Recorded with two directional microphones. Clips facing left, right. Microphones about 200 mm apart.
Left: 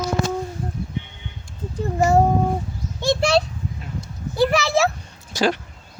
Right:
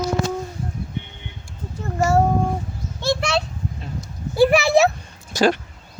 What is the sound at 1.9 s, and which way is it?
Child singing, 15° left (ahead or behind).